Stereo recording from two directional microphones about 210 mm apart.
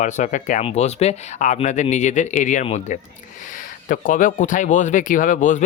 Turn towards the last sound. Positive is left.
turn(degrees=40)  # may be behind; listen again after turning